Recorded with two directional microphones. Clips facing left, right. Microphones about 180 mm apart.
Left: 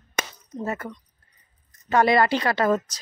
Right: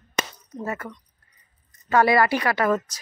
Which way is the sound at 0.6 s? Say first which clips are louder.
Left 1 dB; 30° left (ahead or behind).